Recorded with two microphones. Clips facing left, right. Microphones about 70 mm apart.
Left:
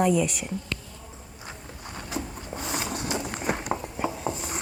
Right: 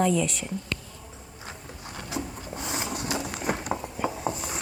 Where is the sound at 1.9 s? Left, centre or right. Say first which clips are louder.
Even; left.